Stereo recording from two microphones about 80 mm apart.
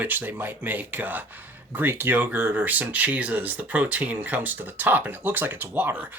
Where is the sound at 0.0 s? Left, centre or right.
Right.